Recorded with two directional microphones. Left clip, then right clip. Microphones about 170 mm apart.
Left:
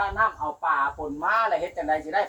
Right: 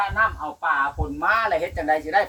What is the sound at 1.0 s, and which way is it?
Speech, 25° right (ahead or behind).